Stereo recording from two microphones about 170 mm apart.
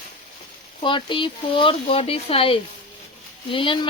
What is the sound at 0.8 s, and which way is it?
Speech, 30° left (ahead or behind).